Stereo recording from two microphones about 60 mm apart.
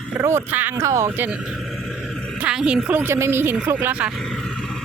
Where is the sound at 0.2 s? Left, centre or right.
Right.